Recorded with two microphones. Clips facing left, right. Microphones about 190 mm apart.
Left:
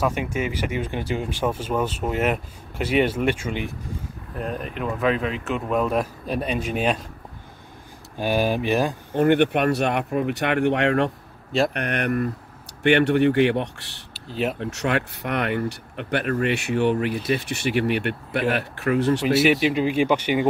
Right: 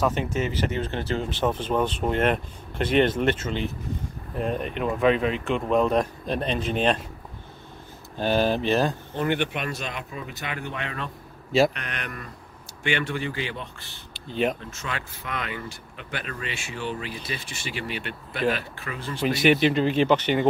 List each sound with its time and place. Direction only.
0.0 s speech: 10° left (ahead or behind)
4.4 s speech: centre (ahead or behind)
8.2 s speech: 10° left (ahead or behind)
9.1 s speech: 55° left (ahead or behind); by 11.1 s 70° left (ahead or behind)
11.7 s speech: 60° left (ahead or behind)
14.1 s speech: 5° left (ahead or behind)
14.6 s speech: 70° left (ahead or behind)
19.2 s speech: 5° left (ahead or behind)